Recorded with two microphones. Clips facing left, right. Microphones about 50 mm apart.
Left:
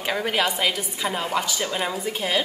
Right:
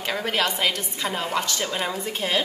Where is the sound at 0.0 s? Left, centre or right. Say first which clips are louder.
Left 1 dB; centre.